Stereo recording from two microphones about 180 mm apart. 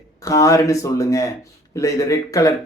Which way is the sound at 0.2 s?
20° left (ahead or behind).